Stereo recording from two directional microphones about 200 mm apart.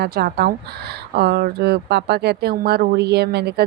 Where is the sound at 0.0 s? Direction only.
50° right (ahead or behind).